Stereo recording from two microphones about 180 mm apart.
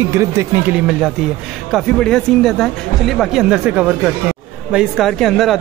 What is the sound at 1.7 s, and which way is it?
A man's voice, centre (ahead or behind).